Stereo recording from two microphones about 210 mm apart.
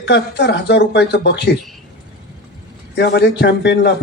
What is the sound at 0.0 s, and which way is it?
A man's voice, 55° left (ahead or behind).